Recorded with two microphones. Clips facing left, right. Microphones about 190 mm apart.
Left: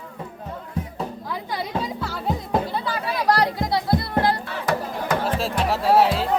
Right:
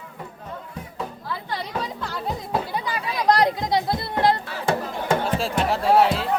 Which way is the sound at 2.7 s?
15° right (ahead or behind).